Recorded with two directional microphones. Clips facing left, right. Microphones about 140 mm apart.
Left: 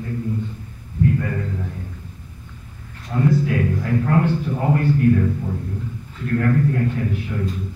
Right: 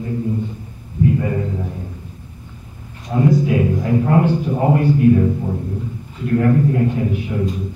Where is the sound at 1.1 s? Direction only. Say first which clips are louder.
Right 4 dB; 20° right (ahead or behind).